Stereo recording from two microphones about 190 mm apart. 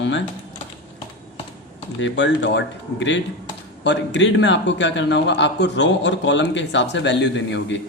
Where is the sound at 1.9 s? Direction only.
75° left (ahead or behind).